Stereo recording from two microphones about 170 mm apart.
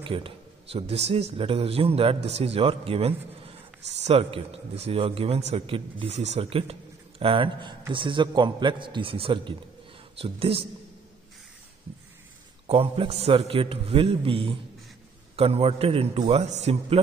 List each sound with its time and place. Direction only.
0.0 s a man's voice: 35° right (ahead or behind)
12.6 s speech: 35° right (ahead or behind)